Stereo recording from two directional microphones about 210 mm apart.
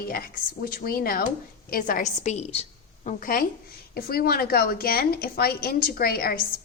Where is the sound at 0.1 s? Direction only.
45° left (ahead or behind).